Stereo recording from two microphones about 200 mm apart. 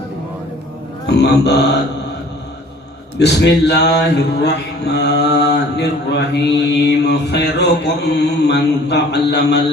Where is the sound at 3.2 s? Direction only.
60° left (ahead or behind).